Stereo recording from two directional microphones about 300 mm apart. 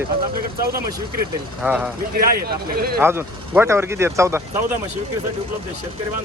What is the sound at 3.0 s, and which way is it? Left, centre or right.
Speech, centre.